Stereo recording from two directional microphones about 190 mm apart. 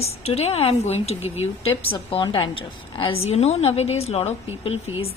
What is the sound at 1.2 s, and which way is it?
Speech, 10° right (ahead or behind).